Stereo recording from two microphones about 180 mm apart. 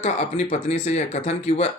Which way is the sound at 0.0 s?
40° left (ahead or behind).